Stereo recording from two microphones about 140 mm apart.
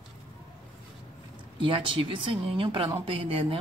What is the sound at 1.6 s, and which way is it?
Speech, 40° right (ahead or behind).